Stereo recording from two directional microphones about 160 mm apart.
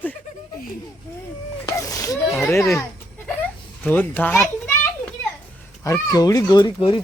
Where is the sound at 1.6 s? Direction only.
20° left (ahead or behind).